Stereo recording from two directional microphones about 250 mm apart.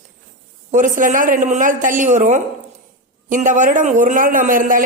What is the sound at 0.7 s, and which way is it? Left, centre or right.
A woman's voice, right.